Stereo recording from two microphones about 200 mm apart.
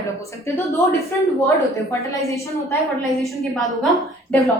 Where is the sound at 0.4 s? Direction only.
15° left (ahead or behind).